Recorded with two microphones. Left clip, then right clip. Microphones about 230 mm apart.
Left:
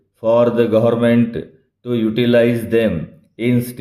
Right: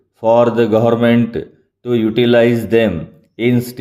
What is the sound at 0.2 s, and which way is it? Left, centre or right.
Speech, right.